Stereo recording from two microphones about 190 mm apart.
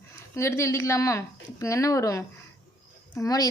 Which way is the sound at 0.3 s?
15° left (ahead or behind).